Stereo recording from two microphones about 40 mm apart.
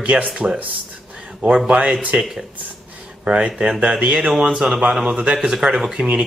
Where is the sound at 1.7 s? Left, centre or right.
Right.